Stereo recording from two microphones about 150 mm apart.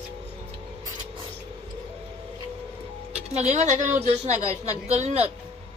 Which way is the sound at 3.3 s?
50° right (ahead or behind).